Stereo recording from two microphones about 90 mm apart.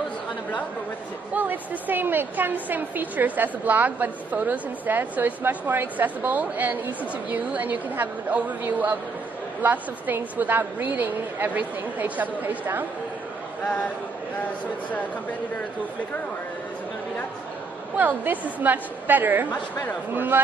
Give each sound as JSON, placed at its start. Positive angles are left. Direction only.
{"t": 1.3, "sound": "a woman's voice", "side_deg": -20}
{"t": 17.9, "sound": "a woman's voice", "side_deg": -20}